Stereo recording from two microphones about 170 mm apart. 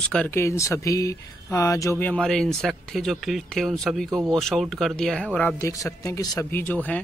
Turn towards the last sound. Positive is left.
turn(degrees=10)  # may be behind; listen again after turning